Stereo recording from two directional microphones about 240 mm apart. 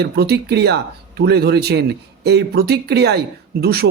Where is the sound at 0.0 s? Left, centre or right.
Right.